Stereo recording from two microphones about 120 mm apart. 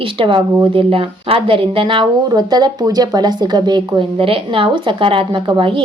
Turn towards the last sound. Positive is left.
turn(degrees=-45)  # may be behind; listen again after turning